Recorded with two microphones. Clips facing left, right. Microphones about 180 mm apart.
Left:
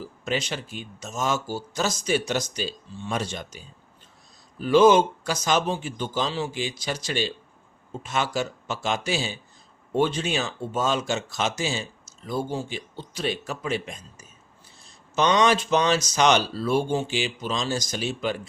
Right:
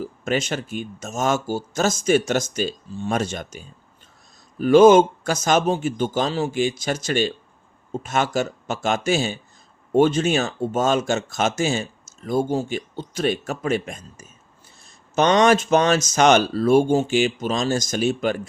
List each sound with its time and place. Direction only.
0.0 s speech: 50° right (ahead or behind)